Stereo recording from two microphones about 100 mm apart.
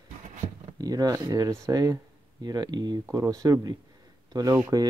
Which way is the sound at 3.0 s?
30° right (ahead or behind).